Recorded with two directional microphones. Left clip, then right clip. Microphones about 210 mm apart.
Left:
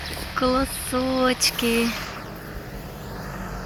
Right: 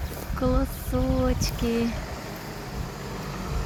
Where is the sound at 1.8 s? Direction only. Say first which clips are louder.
Left 4 dB; 50° right (ahead or behind).